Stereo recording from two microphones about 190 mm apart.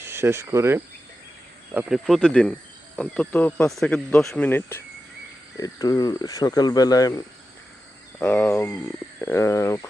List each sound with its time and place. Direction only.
0.0 s speech: 15° right (ahead or behind); by 9.8 s 15° left (ahead or behind)